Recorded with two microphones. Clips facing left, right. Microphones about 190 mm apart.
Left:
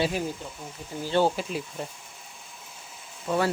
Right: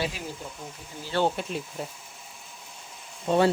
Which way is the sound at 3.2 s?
25° right (ahead or behind).